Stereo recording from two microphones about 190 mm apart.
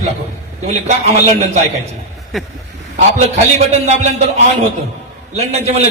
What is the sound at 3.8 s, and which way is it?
Speech, 35° right (ahead or behind).